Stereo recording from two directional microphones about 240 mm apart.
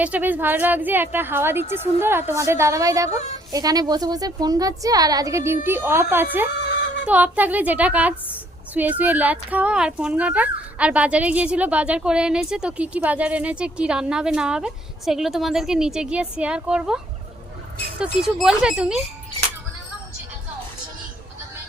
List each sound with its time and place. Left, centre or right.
0.0 s a woman's voice: centre
18.0 s speech: centre